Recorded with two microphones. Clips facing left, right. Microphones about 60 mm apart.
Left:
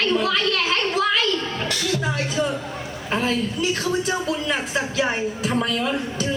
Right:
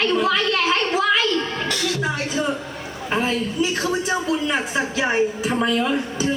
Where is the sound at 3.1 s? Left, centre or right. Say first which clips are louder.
Right 1 dB; centre.